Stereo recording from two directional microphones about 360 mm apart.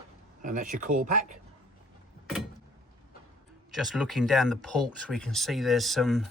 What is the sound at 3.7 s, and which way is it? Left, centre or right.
Speech, centre.